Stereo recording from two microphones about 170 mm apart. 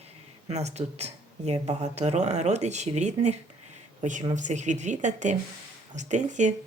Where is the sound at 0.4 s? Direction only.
40° right (ahead or behind).